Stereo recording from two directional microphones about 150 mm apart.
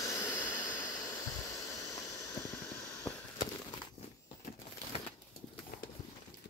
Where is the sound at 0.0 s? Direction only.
20° left (ahead or behind).